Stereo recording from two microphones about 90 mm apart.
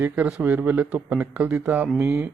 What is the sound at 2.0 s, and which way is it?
Speech, 30° right (ahead or behind).